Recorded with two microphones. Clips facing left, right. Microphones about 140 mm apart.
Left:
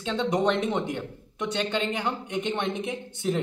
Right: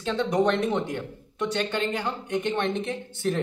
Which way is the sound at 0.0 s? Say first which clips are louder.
Right 1 dB; 20° left (ahead or behind).